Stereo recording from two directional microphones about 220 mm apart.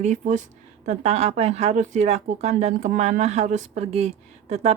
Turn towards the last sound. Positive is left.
turn(degrees=-30)  # may be behind; listen again after turning